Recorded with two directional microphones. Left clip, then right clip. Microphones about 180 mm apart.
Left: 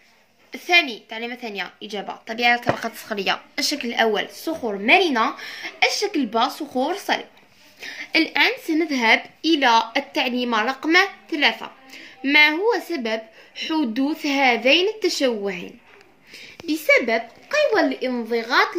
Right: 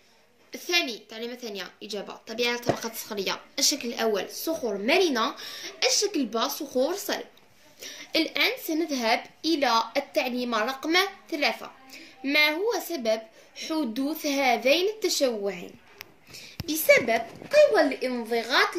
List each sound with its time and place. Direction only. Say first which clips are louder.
0.7 s a woman's voice: left 8 dB; 35° left (ahead or behind)